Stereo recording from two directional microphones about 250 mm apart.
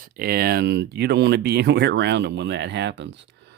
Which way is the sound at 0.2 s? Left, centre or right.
Right.